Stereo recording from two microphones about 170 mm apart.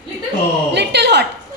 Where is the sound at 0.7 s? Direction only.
80° right.